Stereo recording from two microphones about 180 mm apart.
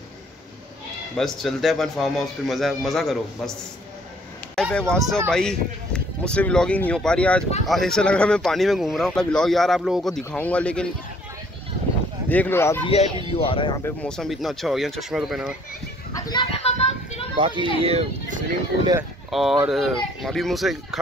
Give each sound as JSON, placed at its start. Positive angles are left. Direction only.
{"t": 1.1, "sound": "speech", "side_deg": 0}
{"t": 4.6, "sound": "speech", "side_deg": 5}
{"t": 12.3, "sound": "speech", "side_deg": 10}
{"t": 12.8, "sound": "speech", "side_deg": 35}
{"t": 13.8, "sound": "speech", "side_deg": 5}
{"t": 16.3, "sound": "a sound", "side_deg": 30}
{"t": 17.4, "sound": "a child's voice", "side_deg": -25}
{"t": 19.3, "sound": "speech", "side_deg": 0}